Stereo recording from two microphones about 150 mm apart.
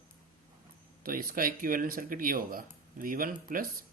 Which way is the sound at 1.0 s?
70° right (ahead or behind).